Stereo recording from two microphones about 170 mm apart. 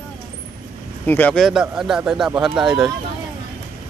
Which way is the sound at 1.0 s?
10° left (ahead or behind).